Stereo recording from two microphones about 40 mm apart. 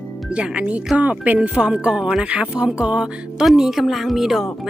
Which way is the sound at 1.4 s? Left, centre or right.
Right.